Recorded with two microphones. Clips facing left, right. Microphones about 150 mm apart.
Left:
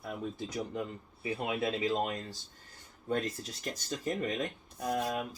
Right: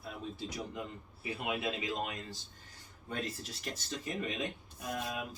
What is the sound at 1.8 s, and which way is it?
Speech, 40° left (ahead or behind).